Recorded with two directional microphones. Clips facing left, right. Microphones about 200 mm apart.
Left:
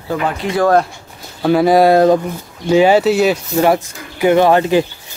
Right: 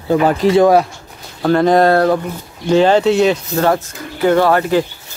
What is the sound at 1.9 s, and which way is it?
Speech, 20° left (ahead or behind).